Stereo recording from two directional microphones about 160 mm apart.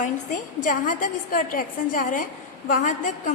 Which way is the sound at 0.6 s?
55° left (ahead or behind).